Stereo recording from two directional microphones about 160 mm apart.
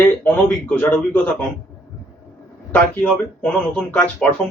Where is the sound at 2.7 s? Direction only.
10° left (ahead or behind).